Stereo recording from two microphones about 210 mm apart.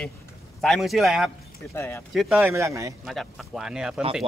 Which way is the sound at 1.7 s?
10° left (ahead or behind).